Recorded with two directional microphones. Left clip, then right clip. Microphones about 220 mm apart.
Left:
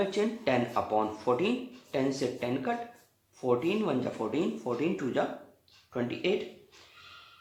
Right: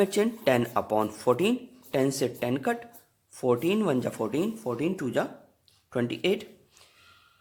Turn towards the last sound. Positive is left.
turn(degrees=-50)  # may be behind; listen again after turning